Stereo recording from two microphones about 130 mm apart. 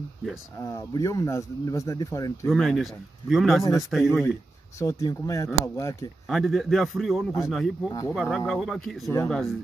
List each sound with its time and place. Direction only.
0.6 s speech: 25° left (ahead or behind)
2.4 s a man's voice: centre (ahead or behind)
4.0 s speech: 20° left (ahead or behind)
6.2 s a man's voice: centre (ahead or behind)